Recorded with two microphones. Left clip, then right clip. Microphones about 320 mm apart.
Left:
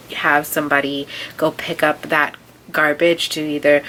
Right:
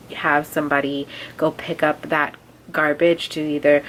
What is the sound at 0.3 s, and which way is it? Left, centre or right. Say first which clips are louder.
Speech: left 3 dB; centre.